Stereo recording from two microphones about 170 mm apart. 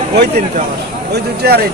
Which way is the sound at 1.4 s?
70° right (ahead or behind).